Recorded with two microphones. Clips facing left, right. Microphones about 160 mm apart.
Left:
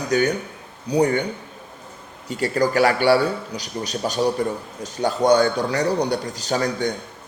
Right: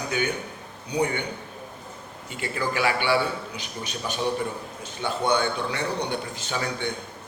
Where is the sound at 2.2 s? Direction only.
40° left (ahead or behind).